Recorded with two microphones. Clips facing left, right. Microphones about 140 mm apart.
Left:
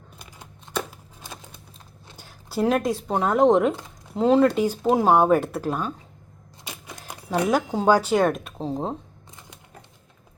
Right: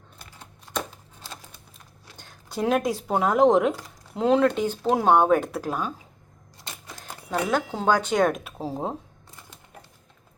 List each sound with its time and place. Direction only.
0.2 s a sound: 15° left (ahead or behind)
1.2 s typing: 20° left (ahead or behind)
2.1 s speech: 5° left (ahead or behind)
6.7 s speech: 10° left (ahead or behind); by 9.0 s 5° right (ahead or behind)